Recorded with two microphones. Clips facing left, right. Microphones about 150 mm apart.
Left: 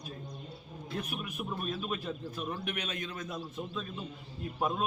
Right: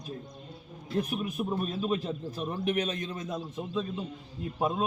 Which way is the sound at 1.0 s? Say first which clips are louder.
Right 9 dB; 35° right (ahead or behind).